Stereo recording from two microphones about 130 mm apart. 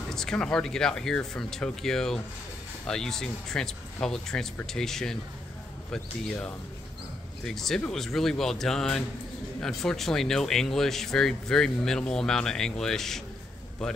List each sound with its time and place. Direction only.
0.1 s speech: 5° left (ahead or behind)